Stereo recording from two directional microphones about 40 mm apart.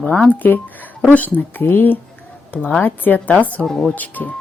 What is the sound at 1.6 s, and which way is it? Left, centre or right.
Speech, left.